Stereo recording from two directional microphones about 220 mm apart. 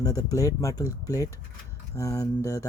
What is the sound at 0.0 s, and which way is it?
Speech, 15° left (ahead or behind).